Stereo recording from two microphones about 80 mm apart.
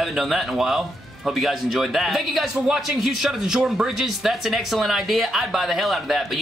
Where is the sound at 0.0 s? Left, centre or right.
Centre.